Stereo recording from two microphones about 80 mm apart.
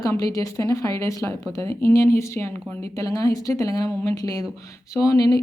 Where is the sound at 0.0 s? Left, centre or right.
Left.